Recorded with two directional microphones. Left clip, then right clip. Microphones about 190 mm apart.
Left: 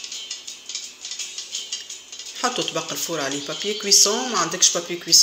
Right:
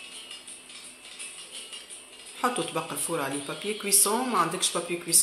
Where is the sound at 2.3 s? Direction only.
15° left (ahead or behind).